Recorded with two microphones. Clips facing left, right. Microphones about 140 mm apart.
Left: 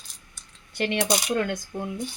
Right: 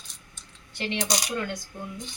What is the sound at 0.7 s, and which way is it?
Speech, 60° left (ahead or behind).